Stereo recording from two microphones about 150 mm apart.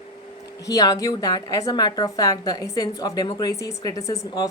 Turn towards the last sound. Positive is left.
turn(degrees=25)  # may be behind; listen again after turning